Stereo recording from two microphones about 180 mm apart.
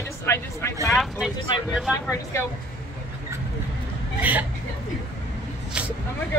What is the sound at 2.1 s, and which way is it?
Speech, 15° left (ahead or behind).